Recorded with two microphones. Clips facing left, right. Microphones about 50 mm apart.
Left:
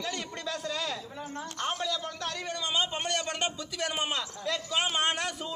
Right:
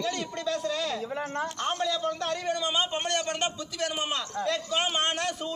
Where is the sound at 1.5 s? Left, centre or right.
Centre.